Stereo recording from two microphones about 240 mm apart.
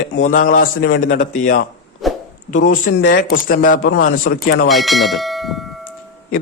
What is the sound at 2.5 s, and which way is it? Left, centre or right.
Speech, left.